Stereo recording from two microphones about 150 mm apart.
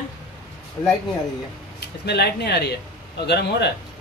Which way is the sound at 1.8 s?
90° left.